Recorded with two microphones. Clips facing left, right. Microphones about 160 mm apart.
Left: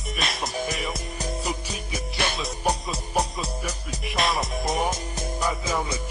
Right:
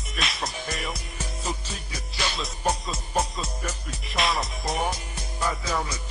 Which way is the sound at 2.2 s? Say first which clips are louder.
Left 3 dB; 60° left (ahead or behind).